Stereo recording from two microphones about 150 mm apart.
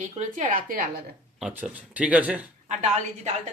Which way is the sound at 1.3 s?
5° right (ahead or behind).